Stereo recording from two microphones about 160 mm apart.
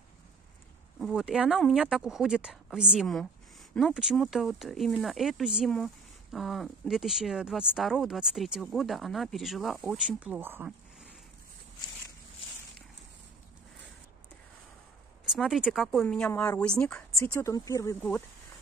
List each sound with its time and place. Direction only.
0.9 s speech: centre (ahead or behind)
15.3 s speech: centre (ahead or behind)
17.4 s speech: 20° left (ahead or behind)